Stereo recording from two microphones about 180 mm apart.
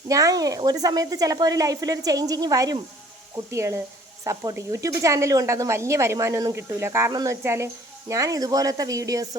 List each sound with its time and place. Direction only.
0.1 s speech: 20° right (ahead or behind)